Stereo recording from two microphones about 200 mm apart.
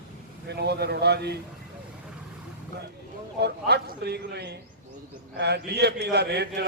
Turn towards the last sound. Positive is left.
turn(degrees=-55)  # may be behind; listen again after turning